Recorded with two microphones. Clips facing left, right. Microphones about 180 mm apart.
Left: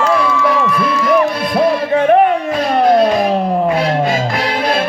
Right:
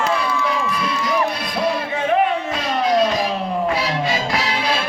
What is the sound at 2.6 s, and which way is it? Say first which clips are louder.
Music: left 7 dB; 55° left (ahead or behind).